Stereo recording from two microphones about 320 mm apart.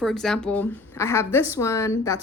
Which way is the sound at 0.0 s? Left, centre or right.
Centre.